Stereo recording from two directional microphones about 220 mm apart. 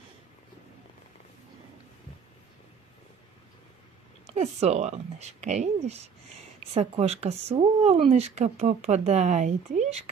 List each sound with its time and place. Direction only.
4.3 s speech: 30° right (ahead or behind)